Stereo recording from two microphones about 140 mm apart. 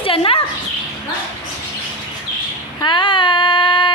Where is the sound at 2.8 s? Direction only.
35° left (ahead or behind).